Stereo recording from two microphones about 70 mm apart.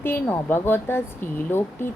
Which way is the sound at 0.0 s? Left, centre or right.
Left.